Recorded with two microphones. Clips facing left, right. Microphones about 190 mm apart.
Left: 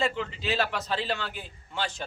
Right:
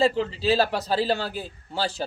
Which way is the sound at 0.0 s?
35° right (ahead or behind).